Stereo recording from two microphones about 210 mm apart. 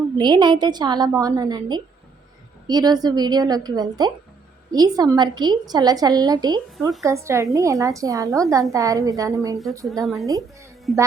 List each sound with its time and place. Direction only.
0.2 s a woman's voice: 20° right (ahead or behind)
9.8 s speech: centre (ahead or behind)